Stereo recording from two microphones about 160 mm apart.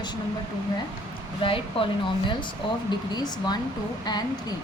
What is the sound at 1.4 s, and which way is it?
Speech, 35° left (ahead or behind).